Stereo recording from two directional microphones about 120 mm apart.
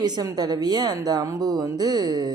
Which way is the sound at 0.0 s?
35° right (ahead or behind).